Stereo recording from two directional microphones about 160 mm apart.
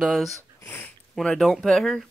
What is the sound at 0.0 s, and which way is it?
Speech, centre (ahead or behind).